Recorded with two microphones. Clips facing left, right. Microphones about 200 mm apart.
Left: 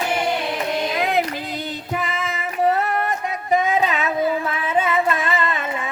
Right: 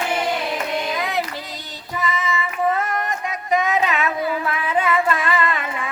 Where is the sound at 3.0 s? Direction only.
30° left (ahead or behind).